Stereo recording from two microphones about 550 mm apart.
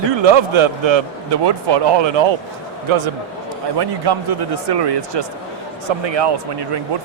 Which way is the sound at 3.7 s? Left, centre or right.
Right.